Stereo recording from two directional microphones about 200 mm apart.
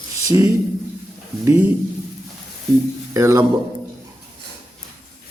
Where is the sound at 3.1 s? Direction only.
15° right (ahead or behind).